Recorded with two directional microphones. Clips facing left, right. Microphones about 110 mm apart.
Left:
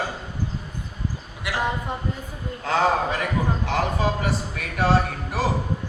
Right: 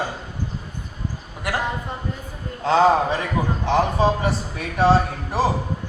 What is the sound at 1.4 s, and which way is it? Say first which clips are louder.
Speech: right 3 dB; 45° right (ahead or behind).